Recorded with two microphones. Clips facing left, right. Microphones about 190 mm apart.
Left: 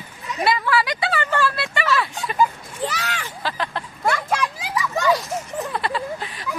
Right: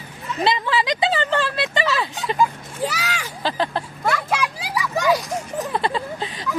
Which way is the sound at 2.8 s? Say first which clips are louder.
Right 1 dB; 10° right (ahead or behind).